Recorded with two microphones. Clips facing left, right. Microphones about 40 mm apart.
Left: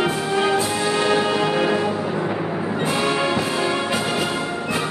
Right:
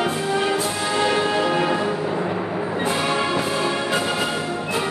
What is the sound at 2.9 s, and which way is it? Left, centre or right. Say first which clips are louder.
Music: left 2 dB; centre.